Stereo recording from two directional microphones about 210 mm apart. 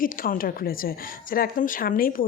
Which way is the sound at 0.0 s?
40° left (ahead or behind).